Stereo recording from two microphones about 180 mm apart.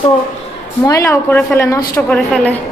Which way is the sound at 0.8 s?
15° left (ahead or behind).